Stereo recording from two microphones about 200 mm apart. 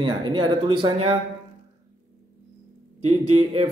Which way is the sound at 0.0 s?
25° right (ahead or behind).